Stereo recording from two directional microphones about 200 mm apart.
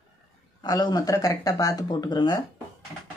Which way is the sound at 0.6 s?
20° left (ahead or behind).